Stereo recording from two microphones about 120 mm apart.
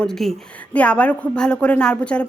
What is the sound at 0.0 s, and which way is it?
A woman's voice, 5° left (ahead or behind).